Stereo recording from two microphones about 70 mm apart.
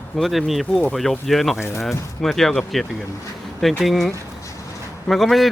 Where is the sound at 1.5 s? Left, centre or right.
Left.